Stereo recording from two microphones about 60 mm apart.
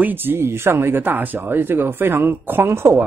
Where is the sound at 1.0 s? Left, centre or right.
Right.